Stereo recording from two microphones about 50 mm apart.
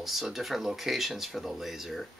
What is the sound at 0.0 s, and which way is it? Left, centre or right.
Speech, centre.